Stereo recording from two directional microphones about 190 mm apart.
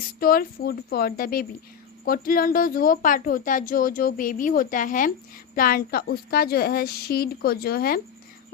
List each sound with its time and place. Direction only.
0.2 s a woman's voice: 50° left (ahead or behind)